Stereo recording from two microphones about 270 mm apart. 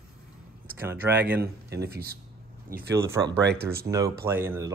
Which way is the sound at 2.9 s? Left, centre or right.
Centre.